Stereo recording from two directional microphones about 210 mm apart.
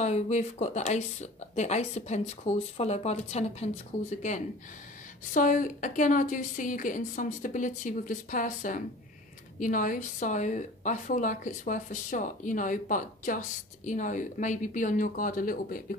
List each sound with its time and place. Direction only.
0.0 s speech: 35° left (ahead or behind)
5.3 s speech: 40° left (ahead or behind)